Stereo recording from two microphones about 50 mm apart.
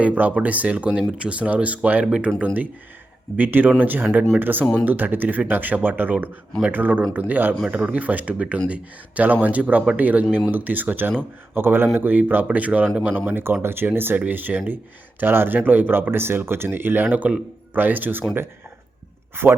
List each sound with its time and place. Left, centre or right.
0.0 s speech: right
2.0 s speech: centre
3.3 s speech: right
13.1 s speech: right